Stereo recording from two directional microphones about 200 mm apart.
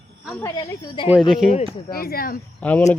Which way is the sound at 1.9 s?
50° left (ahead or behind).